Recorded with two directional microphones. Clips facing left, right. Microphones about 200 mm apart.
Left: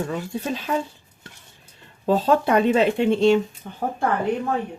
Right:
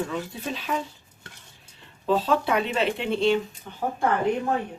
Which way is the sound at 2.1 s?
45° left (ahead or behind).